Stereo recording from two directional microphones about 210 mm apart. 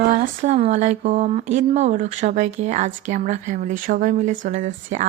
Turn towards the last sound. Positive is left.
turn(degrees=-35)  # may be behind; listen again after turning